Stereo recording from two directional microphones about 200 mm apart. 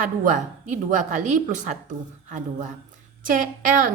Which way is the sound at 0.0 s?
40° right (ahead or behind).